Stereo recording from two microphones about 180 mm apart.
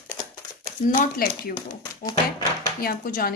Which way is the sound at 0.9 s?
45° left (ahead or behind).